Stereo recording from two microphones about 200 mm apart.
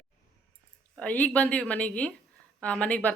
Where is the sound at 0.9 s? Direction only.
5° left (ahead or behind).